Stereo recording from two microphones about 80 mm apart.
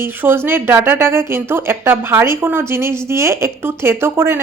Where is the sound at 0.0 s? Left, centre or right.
Right.